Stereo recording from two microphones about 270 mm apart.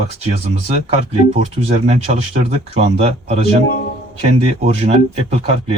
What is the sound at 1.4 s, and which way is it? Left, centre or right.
Speech, right.